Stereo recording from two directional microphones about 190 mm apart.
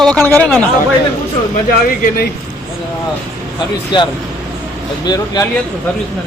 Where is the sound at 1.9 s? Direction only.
50° left (ahead or behind).